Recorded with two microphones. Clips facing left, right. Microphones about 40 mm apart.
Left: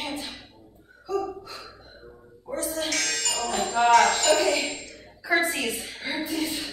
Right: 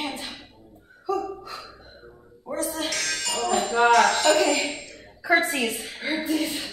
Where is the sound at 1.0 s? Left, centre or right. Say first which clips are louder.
Right 1 dB; right.